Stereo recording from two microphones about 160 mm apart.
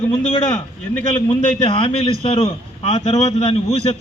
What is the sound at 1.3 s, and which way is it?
A man's voice, 35° left (ahead or behind).